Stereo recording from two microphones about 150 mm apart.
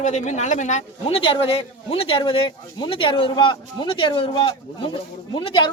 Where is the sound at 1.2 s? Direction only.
40° left (ahead or behind).